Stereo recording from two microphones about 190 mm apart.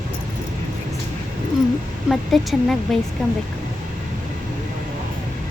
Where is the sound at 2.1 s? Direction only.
Centre (ahead or behind).